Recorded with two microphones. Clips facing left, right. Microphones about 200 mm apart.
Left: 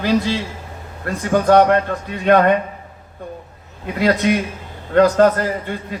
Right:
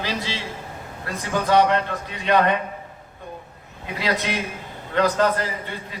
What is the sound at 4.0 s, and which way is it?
A man's voice, 50° left (ahead or behind).